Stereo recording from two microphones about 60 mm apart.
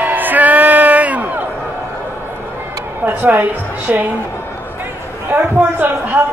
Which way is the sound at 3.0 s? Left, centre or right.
Right.